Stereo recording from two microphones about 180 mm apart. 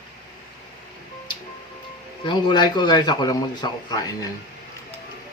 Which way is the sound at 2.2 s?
25° left (ahead or behind).